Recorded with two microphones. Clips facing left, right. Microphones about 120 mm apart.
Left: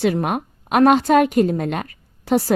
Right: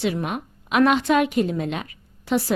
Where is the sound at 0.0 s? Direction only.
50° left (ahead or behind).